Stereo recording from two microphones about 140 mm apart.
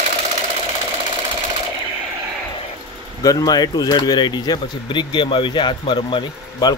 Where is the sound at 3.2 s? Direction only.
25° left (ahead or behind).